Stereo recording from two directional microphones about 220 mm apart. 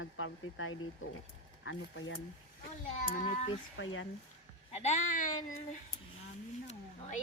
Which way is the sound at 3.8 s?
60° left (ahead or behind).